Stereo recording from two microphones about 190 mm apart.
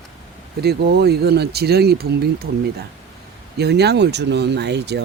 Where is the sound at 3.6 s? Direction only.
60° right (ahead or behind).